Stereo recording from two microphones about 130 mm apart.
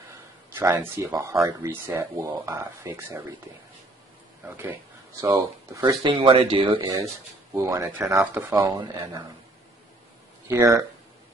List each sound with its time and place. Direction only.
0.6 s speech: 20° right (ahead or behind)
4.5 s speech: 15° right (ahead or behind); by 7.0 s 40° right (ahead or behind)
7.5 s speech: 20° right (ahead or behind)
10.5 s speech: 20° right (ahead or behind)